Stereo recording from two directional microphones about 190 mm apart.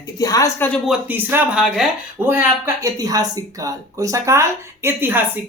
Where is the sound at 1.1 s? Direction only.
10° right (ahead or behind).